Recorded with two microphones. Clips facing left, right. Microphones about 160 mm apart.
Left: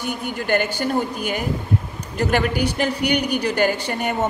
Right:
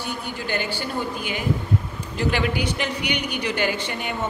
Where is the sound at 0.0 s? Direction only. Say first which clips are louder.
Left 4 dB; 50° left (ahead or behind).